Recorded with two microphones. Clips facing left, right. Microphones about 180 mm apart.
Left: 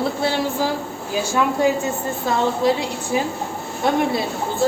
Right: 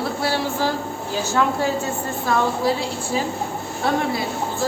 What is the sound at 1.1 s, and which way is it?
Speech, 15° left (ahead or behind).